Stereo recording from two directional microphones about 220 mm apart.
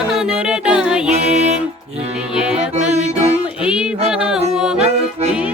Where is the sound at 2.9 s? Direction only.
30° right (ahead or behind).